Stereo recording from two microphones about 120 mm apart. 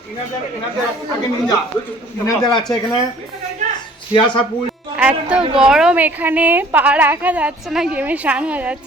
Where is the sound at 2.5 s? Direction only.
40° left (ahead or behind).